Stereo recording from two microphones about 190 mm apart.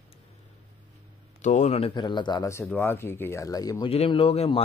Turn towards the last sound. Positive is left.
turn(degrees=30)  # may be behind; listen again after turning